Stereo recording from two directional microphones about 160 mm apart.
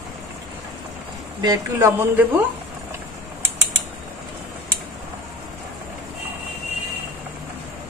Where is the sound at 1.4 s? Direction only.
20° right (ahead or behind).